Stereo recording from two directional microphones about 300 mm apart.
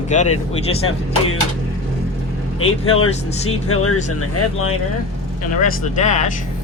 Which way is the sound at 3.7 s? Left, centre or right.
Left.